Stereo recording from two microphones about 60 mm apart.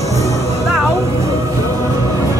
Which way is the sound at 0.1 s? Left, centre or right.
Right.